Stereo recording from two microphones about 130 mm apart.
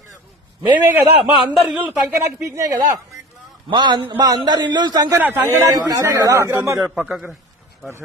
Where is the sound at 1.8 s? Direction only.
10° right (ahead or behind).